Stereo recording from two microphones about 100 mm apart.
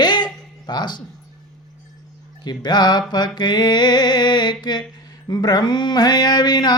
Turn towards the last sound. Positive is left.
turn(degrees=45)  # may be behind; listen again after turning